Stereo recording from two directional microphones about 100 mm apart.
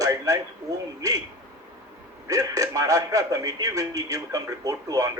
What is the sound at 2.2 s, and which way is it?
A man's voice, 35° right (ahead or behind).